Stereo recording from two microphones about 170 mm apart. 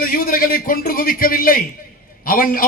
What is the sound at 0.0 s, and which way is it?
A man's voice, 55° left (ahead or behind).